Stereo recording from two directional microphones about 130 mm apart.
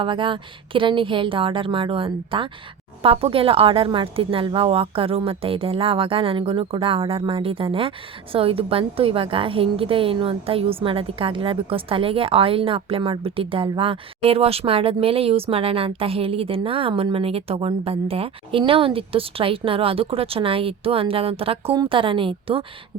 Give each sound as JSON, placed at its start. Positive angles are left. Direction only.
{"t": 0.0, "sound": "a woman's voice", "side_deg": -40}